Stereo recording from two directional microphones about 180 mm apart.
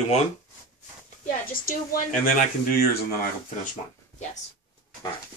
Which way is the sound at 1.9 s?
50° left (ahead or behind).